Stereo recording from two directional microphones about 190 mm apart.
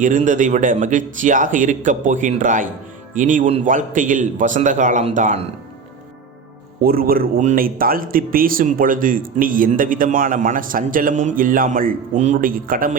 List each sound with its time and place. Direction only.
0.0 s a man's voice: 40° right (ahead or behind)
6.8 s speech: 50° right (ahead or behind)